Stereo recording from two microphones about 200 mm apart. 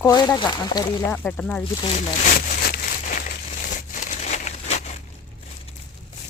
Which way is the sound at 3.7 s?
40° left (ahead or behind).